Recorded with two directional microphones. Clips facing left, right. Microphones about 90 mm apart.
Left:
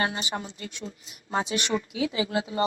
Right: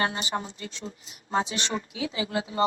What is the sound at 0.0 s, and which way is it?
A woman's voice, 35° right (ahead or behind).